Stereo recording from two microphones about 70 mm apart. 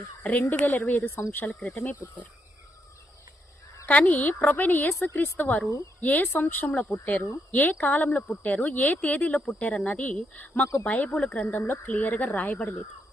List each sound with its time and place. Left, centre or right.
0.2 s a woman's voice: left
3.8 s a woman's voice: left